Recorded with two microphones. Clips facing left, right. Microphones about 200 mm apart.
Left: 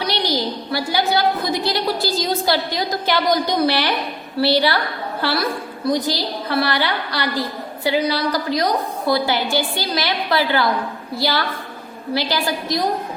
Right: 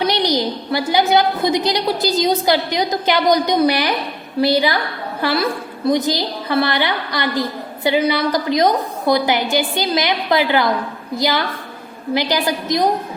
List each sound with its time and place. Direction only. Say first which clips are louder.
0.0 s a woman's voice: right 4 dB; 20° right (ahead or behind)